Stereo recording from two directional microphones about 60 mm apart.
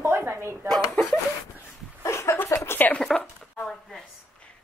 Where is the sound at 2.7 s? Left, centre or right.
Left.